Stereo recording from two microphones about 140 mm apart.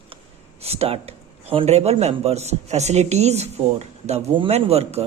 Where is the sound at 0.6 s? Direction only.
45° right (ahead or behind).